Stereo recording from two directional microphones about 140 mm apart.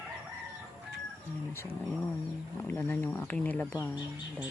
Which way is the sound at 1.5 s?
15° left (ahead or behind).